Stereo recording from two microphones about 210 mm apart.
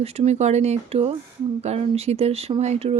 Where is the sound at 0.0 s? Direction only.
30° right (ahead or behind).